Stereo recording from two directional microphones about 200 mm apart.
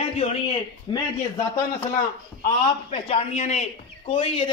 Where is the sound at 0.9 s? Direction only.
25° left (ahead or behind).